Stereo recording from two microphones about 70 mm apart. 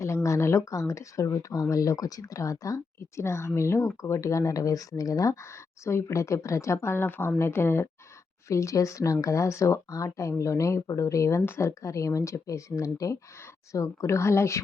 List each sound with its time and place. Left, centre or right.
0.0 s speech: left
11.7 s speech: left